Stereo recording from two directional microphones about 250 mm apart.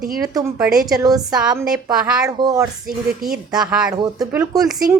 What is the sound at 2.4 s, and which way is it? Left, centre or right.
Speech, centre.